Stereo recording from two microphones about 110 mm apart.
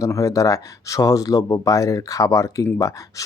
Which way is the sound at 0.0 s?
30° left (ahead or behind).